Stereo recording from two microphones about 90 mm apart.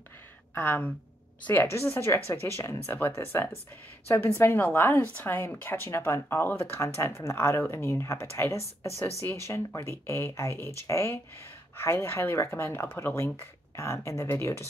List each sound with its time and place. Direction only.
0.6 s a woman's voice: 20° left (ahead or behind)